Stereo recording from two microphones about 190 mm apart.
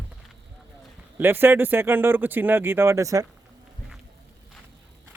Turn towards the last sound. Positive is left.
turn(degrees=-15)  # may be behind; listen again after turning